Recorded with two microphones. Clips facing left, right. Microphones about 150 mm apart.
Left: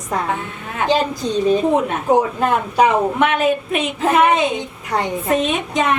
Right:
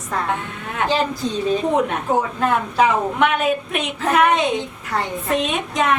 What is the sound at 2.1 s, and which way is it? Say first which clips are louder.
Speech: left 6 dB; 15° left (ahead or behind).